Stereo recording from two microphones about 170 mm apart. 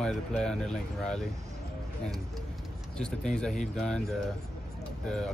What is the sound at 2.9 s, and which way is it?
Speech, 5° left (ahead or behind).